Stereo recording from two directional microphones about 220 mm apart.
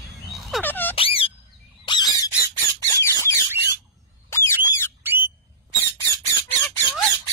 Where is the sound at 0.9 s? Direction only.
25° left (ahead or behind).